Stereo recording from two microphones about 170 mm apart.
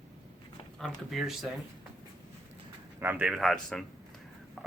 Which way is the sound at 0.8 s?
Centre (ahead or behind).